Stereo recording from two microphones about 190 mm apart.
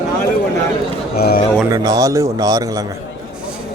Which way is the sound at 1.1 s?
55° left (ahead or behind).